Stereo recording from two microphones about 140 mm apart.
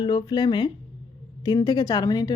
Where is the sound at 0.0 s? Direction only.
30° left (ahead or behind).